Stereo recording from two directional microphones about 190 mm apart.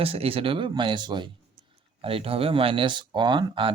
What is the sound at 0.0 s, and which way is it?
Speech, 30° right (ahead or behind).